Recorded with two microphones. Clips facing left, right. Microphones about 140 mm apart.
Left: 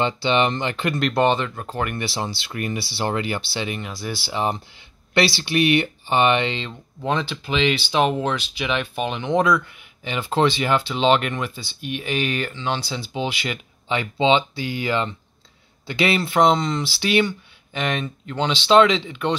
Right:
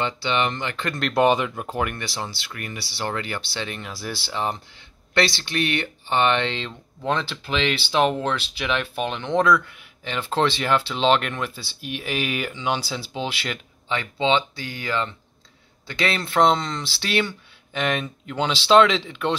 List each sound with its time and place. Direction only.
0.0 s speech: 25° left (ahead or behind)
0.9 s speech: centre (ahead or behind)
2.0 s speech: 15° left (ahead or behind); by 4.3 s centre (ahead or behind)
4.3 s speech: 15° left (ahead or behind)
13.8 s speech: 20° left (ahead or behind); by 19.3 s centre (ahead or behind)